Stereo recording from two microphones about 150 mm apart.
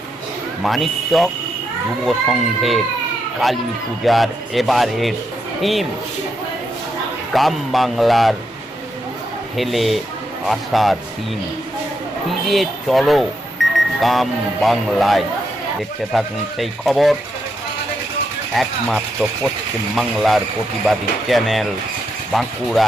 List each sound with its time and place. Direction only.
0.6 s speech: centre (ahead or behind)
2.6 s speech: centre (ahead or behind)
7.3 s speech: centre (ahead or behind)
9.6 s speech: centre (ahead or behind)
12.5 s speech: centre (ahead or behind)
13.6 s alarm clock: centre (ahead or behind)
14.0 s speech: centre (ahead or behind)
18.5 s speech: centre (ahead or behind)